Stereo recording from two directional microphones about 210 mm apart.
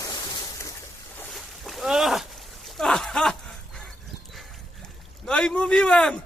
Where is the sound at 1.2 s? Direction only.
Centre (ahead or behind).